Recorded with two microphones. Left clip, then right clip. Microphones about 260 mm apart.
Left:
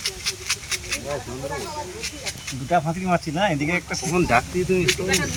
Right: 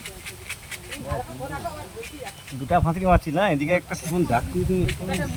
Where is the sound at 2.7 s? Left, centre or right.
Centre.